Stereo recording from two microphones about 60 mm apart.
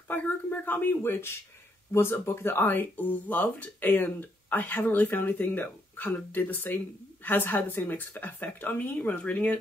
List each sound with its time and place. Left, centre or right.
0.1 s speech: left